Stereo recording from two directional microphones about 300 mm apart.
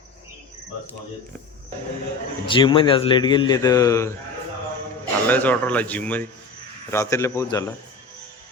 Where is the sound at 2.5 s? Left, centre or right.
Centre.